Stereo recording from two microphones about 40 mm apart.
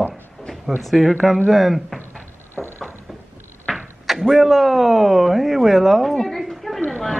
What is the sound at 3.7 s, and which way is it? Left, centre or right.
Speech, centre.